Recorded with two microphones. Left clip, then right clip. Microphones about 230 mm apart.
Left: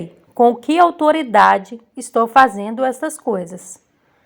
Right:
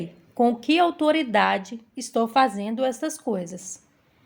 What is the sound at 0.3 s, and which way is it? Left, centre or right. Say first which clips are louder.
A woman's voice: left 8 dB; centre.